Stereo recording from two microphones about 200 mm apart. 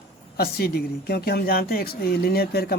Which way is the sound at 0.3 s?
50° left (ahead or behind).